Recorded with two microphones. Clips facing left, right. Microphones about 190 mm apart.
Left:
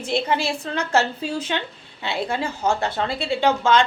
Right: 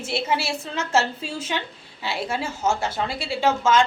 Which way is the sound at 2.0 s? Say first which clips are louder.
Left 2 dB; 5° right (ahead or behind).